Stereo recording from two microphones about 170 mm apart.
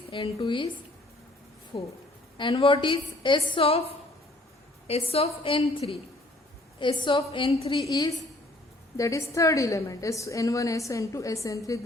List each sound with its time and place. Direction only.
0.1 s a woman's voice: 30° left (ahead or behind)
1.7 s a woman's voice: 30° left (ahead or behind)
6.7 s a woman's voice: 30° left (ahead or behind)